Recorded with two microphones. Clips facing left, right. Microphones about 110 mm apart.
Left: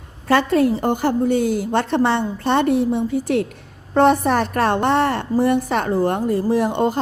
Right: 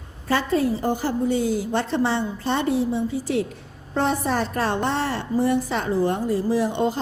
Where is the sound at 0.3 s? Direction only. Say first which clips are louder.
Left 5 dB; 65° left (ahead or behind).